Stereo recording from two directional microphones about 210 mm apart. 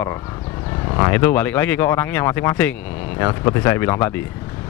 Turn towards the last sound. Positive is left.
turn(degrees=10)  # may be behind; listen again after turning